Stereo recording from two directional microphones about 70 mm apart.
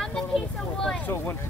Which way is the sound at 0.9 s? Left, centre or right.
Left.